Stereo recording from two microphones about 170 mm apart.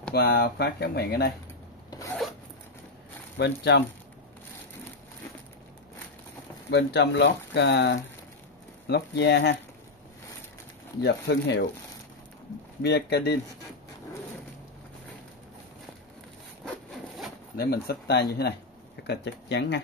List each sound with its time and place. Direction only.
0.1 s speech: 70° left (ahead or behind)
1.9 s zipper: 20° left (ahead or behind)
3.3 s speech: 85° left
6.7 s speech: 85° left
8.8 s speech: 80° left
11.0 s speech: 85° left
12.8 s speech: 75° left (ahead or behind)
17.6 s speech: 65° left (ahead or behind)
19.0 s speech: 90° left